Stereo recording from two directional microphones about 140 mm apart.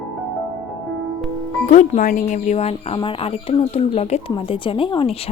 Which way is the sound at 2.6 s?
45° left (ahead or behind).